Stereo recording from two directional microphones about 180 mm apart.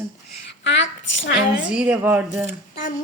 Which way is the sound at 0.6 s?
85° left.